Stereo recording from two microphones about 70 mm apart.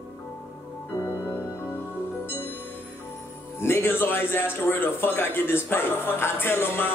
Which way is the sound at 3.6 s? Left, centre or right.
Left.